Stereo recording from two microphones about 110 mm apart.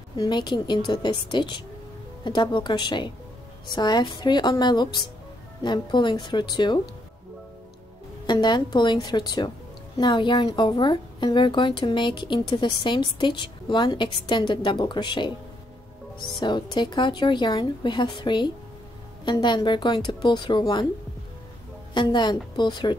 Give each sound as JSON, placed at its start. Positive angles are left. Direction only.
{"t": 0.2, "sound": "a woman's voice", "side_deg": 45}
{"t": 8.3, "sound": "speech", "side_deg": 40}
{"t": 21.9, "sound": "speech", "side_deg": 45}